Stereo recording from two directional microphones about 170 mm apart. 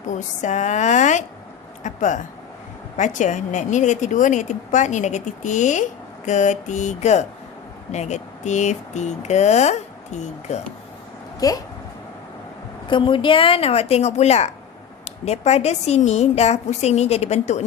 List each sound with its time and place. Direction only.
0.1 s a woman's voice: 45° left (ahead or behind)
11.3 s speech: 20° left (ahead or behind)
12.9 s a woman's voice: 30° left (ahead or behind)